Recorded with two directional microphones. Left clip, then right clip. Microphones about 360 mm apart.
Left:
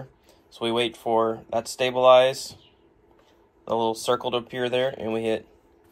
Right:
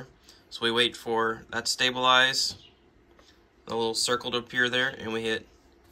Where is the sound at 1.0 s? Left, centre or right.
Centre.